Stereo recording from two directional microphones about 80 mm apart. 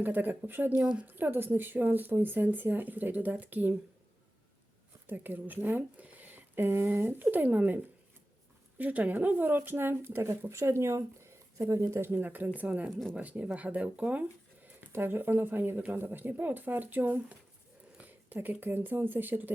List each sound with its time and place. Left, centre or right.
0.0 s speech: right
0.8 s speech: centre
1.0 s speech: right
5.0 s speech: right
14.9 s speech: right